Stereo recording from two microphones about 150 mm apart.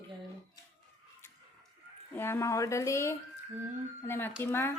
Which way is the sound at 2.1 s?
15° left (ahead or behind).